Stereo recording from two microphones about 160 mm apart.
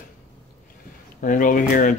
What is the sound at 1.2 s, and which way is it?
Speech, 55° left (ahead or behind).